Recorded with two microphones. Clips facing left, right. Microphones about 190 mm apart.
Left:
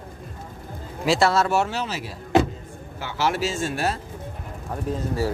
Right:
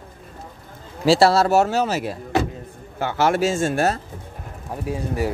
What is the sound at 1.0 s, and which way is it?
Speech, 35° right (ahead or behind).